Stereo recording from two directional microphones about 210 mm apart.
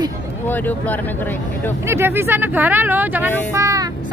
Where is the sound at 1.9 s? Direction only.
10° right (ahead or behind).